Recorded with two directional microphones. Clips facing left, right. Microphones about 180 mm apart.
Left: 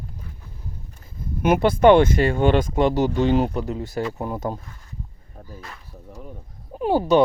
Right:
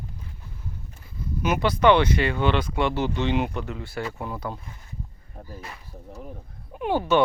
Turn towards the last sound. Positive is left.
turn(degrees=35)  # may be behind; listen again after turning